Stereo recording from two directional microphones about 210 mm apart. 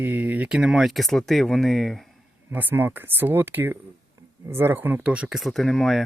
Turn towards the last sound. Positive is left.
turn(degrees=0)  # may be behind; listen again after turning